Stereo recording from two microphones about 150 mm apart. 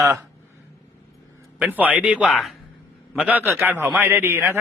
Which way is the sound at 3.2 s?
10° right (ahead or behind).